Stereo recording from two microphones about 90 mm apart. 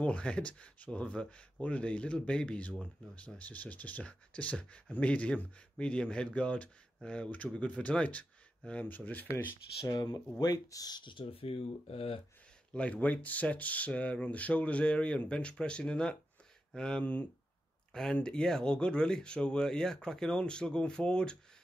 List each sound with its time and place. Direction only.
0.0 s speech: 15° left (ahead or behind)
9.8 s speech: 45° left (ahead or behind)
11.1 s speech: 80° left
12.7 s speech: 15° left (ahead or behind)